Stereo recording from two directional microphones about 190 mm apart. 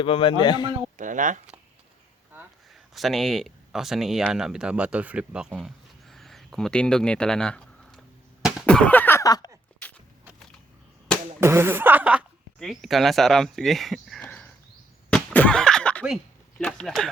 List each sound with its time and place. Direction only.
0.0 s a man's voice: 25° left (ahead or behind)
0.9 s speech: 45° right (ahead or behind)
2.9 s speech: centre (ahead or behind)
8.6 s a sound: 5° left (ahead or behind)
11.3 s speech: 15° right (ahead or behind); by 14.5 s 5° left (ahead or behind)
15.1 s a sound: 5° left (ahead or behind)
16.6 s speech: centre (ahead or behind)